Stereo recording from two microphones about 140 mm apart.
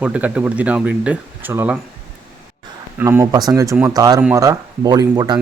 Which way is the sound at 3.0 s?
15° right (ahead or behind).